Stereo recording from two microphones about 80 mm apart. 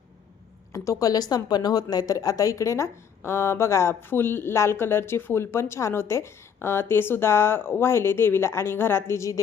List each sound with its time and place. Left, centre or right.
0.7 s speech: left